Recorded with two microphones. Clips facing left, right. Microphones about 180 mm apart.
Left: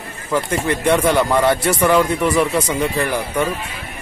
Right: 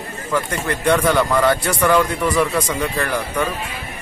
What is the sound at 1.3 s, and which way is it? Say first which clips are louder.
Speech: left 1 dB; 25° left (ahead or behind).